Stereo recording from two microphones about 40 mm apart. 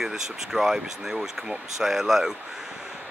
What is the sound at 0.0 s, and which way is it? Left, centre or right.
Speech, centre.